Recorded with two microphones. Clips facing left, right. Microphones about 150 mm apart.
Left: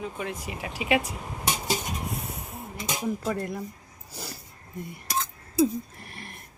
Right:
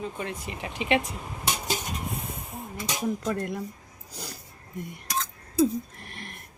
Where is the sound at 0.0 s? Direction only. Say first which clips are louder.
Even; 5° left (ahead or behind).